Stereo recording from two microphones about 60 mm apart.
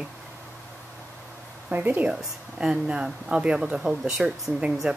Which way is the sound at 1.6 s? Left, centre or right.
Right.